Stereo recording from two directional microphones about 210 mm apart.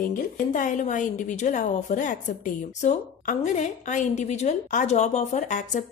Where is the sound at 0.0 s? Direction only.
40° left (ahead or behind).